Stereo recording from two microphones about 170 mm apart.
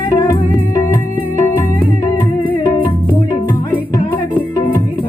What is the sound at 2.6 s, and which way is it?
Music, 25° left (ahead or behind).